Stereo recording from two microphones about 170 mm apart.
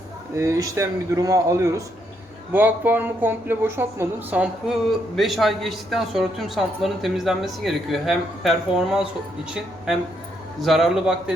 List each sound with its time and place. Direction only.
0.3 s speech: 20° right (ahead or behind); by 11.1 s centre (ahead or behind)